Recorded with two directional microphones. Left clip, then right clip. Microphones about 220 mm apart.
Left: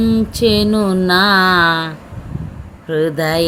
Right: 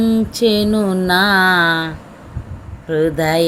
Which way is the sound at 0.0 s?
15° left (ahead or behind).